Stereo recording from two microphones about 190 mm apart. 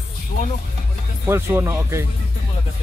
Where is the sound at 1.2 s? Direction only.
10° right (ahead or behind).